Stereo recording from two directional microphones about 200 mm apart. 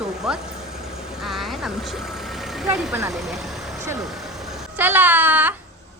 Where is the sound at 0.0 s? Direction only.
5° right (ahead or behind).